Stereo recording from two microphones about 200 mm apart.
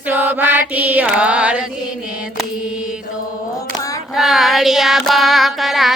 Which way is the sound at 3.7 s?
15° left (ahead or behind).